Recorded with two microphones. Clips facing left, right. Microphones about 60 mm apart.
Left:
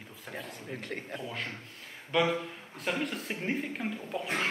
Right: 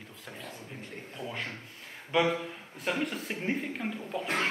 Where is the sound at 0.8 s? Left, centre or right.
Left.